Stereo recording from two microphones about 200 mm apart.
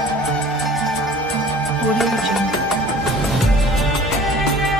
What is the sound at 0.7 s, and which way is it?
Music, centre (ahead or behind).